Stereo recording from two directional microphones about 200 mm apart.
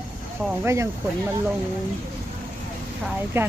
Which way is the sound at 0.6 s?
15° right (ahead or behind).